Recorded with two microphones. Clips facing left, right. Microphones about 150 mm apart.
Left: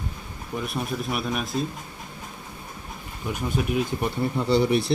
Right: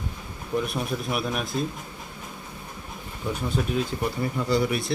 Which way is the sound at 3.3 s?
10° left (ahead or behind).